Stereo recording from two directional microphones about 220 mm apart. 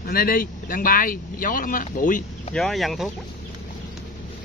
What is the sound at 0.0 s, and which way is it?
Speech, 40° left (ahead or behind).